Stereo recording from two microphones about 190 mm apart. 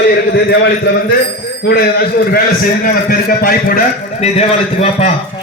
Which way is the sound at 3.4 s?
50° left (ahead or behind).